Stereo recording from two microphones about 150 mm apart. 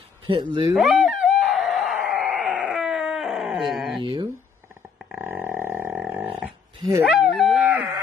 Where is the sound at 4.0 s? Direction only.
30° right (ahead or behind).